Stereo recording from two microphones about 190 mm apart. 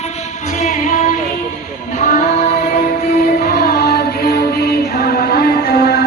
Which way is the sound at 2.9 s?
50° left (ahead or behind).